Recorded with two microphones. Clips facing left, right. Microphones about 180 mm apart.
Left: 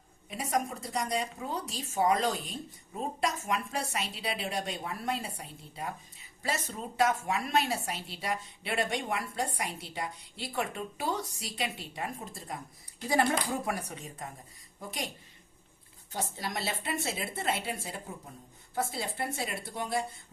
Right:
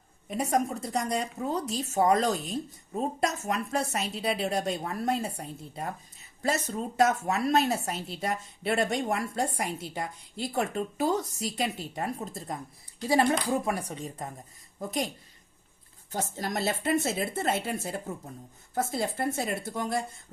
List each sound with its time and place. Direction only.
0.3 s a woman's voice: 45° right (ahead or behind)
13.7 s speech: 30° right (ahead or behind)
14.8 s a woman's voice: 45° right (ahead or behind)
16.1 s a woman's voice: 45° right (ahead or behind)